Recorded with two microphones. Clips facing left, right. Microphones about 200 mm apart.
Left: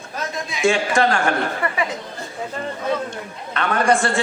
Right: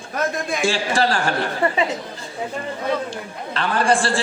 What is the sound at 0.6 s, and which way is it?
A man's voice, 35° right (ahead or behind).